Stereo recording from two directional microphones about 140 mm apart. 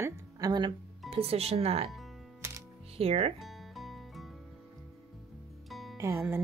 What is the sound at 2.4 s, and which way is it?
Music, 20° right (ahead or behind).